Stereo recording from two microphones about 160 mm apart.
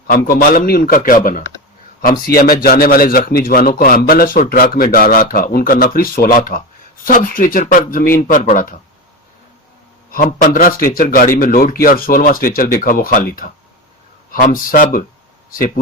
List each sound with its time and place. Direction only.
0.1 s a man's voice: 65° left (ahead or behind)
2.0 s a man's voice: 70° left (ahead or behind)
10.1 s a man's voice: 60° left (ahead or behind)